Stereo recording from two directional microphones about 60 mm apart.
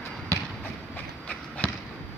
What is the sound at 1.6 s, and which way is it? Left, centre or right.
Basketball bounce, left.